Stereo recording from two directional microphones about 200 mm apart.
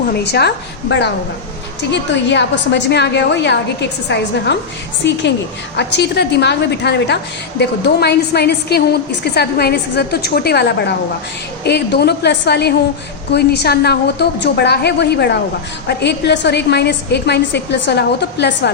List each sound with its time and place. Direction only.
0.1 s a woman's voice: 55° left (ahead or behind)